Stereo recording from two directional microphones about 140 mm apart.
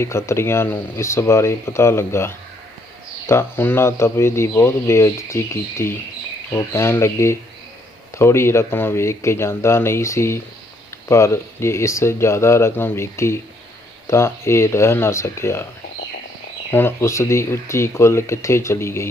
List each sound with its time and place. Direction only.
0.0 s speech: 20° left (ahead or behind)
16.7 s speech: 15° left (ahead or behind)